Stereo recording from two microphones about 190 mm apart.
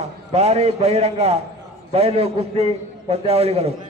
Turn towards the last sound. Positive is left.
turn(degrees=-35)  # may be behind; listen again after turning